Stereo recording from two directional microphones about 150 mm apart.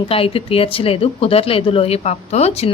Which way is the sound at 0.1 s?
40° left (ahead or behind).